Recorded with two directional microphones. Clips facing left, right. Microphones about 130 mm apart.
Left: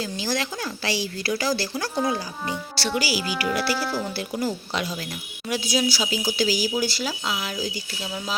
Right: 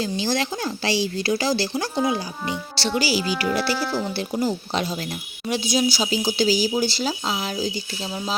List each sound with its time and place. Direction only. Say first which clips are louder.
0.0 s speech: right 3 dB; 25° right (ahead or behind)
3.8 s speech: right 2 dB; 5° left (ahead or behind)
4.2 s speech: right 3 dB; 25° right (ahead or behind)